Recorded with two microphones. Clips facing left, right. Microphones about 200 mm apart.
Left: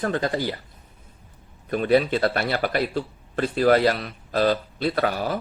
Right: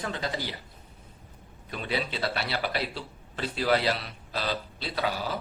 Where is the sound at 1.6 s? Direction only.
50° left (ahead or behind).